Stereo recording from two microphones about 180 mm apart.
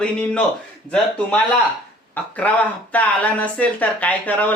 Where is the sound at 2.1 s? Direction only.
10° left (ahead or behind).